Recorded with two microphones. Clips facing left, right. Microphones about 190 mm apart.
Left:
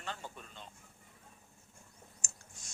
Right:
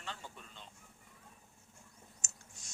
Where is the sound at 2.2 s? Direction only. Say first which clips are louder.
Left 2 dB; 50° left (ahead or behind).